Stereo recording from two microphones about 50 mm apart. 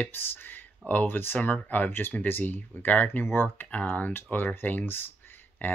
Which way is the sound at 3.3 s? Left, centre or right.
Left.